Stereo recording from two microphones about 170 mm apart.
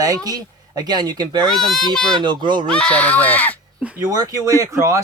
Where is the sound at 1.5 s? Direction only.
Centre (ahead or behind).